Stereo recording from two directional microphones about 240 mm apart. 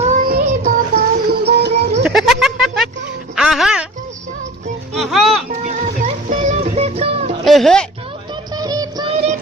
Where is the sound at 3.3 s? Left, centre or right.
Centre.